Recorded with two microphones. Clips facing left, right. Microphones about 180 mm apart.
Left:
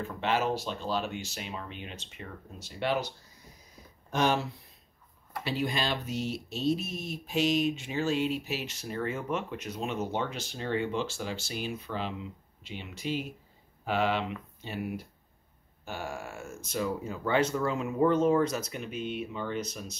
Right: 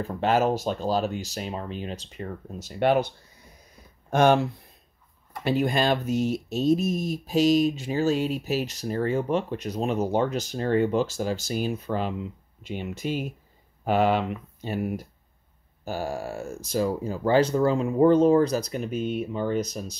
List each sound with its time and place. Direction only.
0.0 s speech: 40° right (ahead or behind)
4.1 s speech: 55° right (ahead or behind); by 20.0 s 35° right (ahead or behind)